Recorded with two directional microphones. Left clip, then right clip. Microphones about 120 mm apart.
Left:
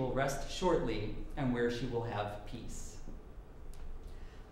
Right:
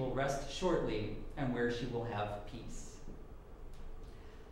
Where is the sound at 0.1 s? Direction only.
25° left (ahead or behind).